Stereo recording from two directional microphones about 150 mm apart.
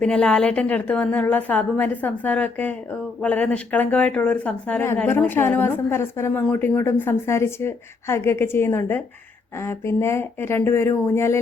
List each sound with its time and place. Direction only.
0.0 s speech: 5° left (ahead or behind)